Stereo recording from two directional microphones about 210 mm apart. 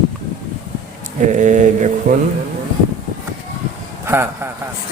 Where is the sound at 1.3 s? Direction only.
35° right (ahead or behind).